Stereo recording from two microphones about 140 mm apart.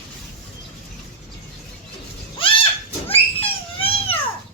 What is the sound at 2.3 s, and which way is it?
Goat, 40° left (ahead or behind).